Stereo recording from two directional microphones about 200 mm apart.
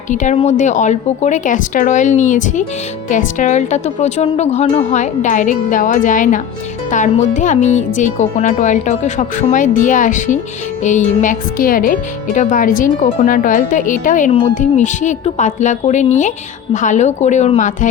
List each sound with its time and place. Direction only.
0.1 s speech: 40° left (ahead or behind)